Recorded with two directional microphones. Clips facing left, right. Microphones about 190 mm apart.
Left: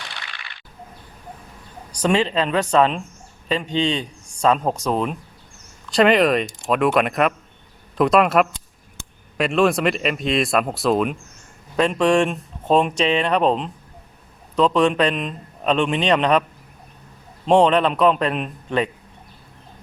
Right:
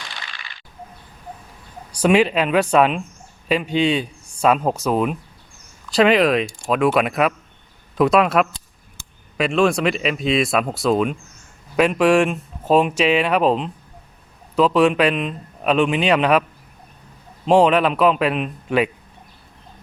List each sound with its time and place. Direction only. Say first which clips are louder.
0.1 s whip: right 1 dB; 65° left (ahead or behind)
1.9 s a man's voice: right 4 dB; 10° right (ahead or behind)
17.4 s a man's voice: right 1 dB; 5° right (ahead or behind)